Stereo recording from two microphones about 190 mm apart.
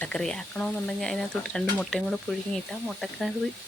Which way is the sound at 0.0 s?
5° left (ahead or behind).